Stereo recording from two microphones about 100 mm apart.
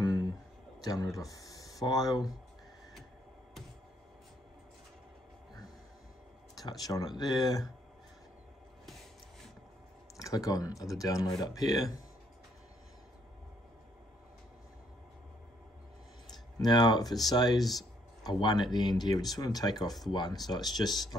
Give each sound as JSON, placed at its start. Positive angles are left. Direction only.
{"t": 0.0, "sound": "a sound", "side_deg": 45}
{"t": 0.8, "sound": "speech", "side_deg": 40}
{"t": 6.5, "sound": "speech", "side_deg": 40}
{"t": 10.1, "sound": "speech", "side_deg": 35}
{"t": 16.5, "sound": "speech", "side_deg": 45}
{"t": 17.6, "sound": "speech", "side_deg": 0}
{"t": 18.2, "sound": "speech", "side_deg": 45}